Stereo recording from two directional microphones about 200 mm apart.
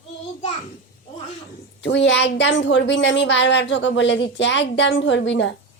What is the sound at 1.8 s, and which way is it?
A woman's voice, 65° left (ahead or behind).